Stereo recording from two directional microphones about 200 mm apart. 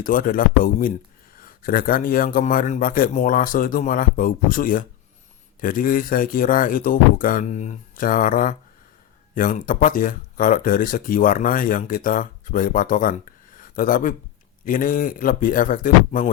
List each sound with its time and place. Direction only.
0.0 s speech: 45° left (ahead or behind)